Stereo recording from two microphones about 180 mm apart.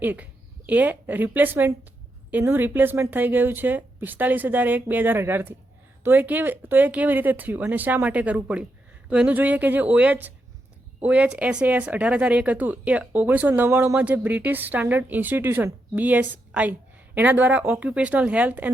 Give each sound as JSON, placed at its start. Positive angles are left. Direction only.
{"t": 0.0, "sound": "speech", "side_deg": -10}